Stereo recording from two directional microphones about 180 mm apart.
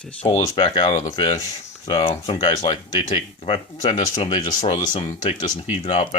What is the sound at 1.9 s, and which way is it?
Speech, 30° left (ahead or behind).